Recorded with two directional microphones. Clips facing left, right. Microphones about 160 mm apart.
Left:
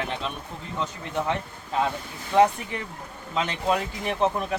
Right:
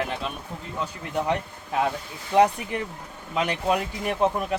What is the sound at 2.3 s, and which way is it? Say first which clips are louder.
Speech: even; 15° right (ahead or behind).